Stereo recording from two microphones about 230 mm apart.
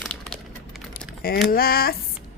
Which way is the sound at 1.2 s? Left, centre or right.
Left.